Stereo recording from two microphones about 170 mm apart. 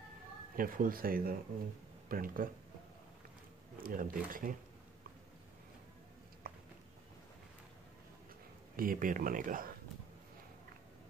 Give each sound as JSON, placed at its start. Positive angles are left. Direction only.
{"t": 0.6, "sound": "speech", "side_deg": -60}
{"t": 3.8, "sound": "speech", "side_deg": -55}
{"t": 6.4, "sound": "a sound", "side_deg": -60}
{"t": 8.7, "sound": "speech", "side_deg": -55}